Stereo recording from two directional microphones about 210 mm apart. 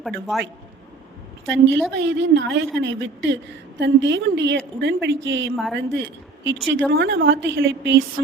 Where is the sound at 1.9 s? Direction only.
60° right (ahead or behind).